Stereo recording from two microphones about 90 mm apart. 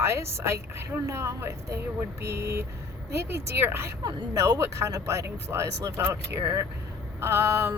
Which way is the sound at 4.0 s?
45° right (ahead or behind).